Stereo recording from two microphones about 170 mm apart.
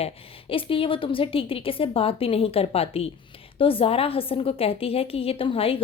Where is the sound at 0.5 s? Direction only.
30° left (ahead or behind).